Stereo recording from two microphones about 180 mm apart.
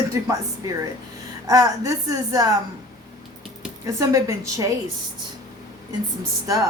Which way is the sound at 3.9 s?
20° right (ahead or behind).